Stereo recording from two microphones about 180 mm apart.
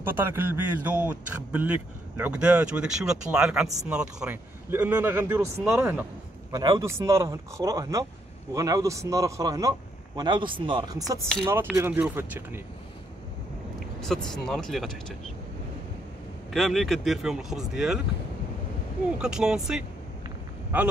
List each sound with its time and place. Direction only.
0.0 s speech: 10° right (ahead or behind)
6.5 s speech: 20° right (ahead or behind)
14.0 s speech: 5° left (ahead or behind)
16.5 s speech: centre (ahead or behind)
19.1 s speech: 5° right (ahead or behind)